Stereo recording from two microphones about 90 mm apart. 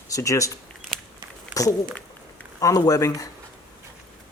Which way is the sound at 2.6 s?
40° left (ahead or behind).